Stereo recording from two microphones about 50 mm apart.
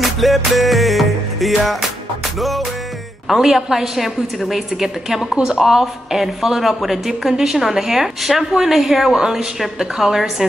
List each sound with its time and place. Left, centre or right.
0.0 s music: centre
3.3 s a woman's voice: centre